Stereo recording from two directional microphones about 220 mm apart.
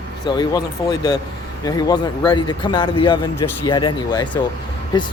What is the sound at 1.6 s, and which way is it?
Speech, 15° left (ahead or behind).